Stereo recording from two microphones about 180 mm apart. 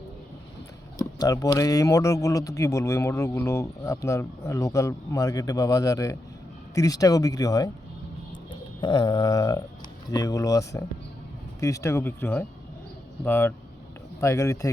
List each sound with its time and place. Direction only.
1.2 s speech: 20° left (ahead or behind)
8.8 s speech: 25° left (ahead or behind)